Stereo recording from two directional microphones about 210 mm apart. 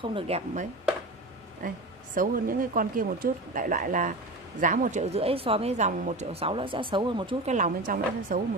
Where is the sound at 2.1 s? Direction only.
40° right (ahead or behind).